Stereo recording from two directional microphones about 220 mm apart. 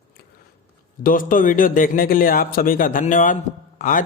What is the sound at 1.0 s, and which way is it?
A man's voice, 40° left (ahead or behind).